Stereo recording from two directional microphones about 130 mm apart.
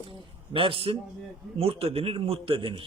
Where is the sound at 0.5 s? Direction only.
45° right (ahead or behind).